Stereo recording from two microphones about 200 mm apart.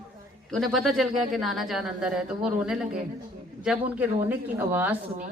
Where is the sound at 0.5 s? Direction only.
Centre (ahead or behind).